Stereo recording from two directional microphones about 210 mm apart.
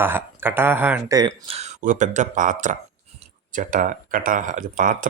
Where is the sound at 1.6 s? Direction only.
35° right (ahead or behind).